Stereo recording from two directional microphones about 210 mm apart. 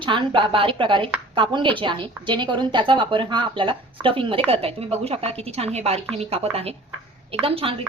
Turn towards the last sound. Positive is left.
turn(degrees=-25)  # may be behind; listen again after turning